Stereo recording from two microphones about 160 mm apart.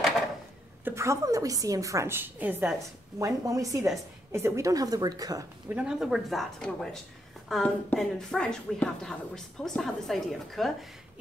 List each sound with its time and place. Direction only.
0.8 s a woman's voice: 15° right (ahead or behind)
5.7 s speech: 5° right (ahead or behind)